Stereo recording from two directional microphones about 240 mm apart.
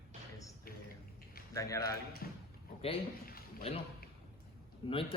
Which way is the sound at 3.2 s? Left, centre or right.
Left.